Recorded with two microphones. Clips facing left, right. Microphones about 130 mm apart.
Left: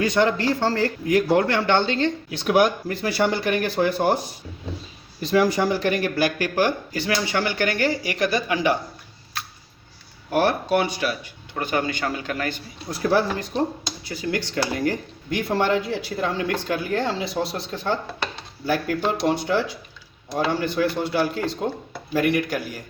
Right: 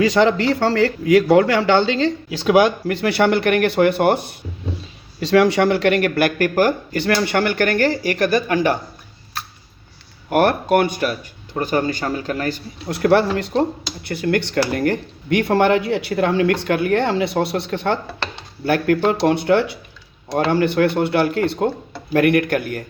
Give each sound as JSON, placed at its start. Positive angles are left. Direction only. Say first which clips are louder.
{"t": 0.0, "sound": "a man's voice", "louder": "right 5 dB", "side_deg": -90}
{"t": 5.2, "sound": "speech", "louder": "right 5 dB", "side_deg": -85}
{"t": 10.2, "sound": "speech", "louder": "right 5 dB", "side_deg": -55}
{"t": 12.9, "sound": "speech", "louder": "right 6 dB", "side_deg": -70}